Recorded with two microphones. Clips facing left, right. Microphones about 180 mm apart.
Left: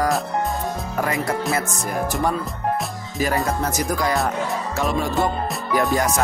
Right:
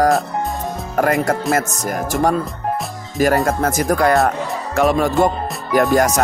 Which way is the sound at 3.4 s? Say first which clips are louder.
Right 5 dB; 50° right (ahead or behind).